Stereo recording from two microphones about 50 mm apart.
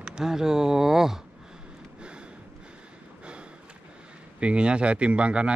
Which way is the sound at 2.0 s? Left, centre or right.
Centre.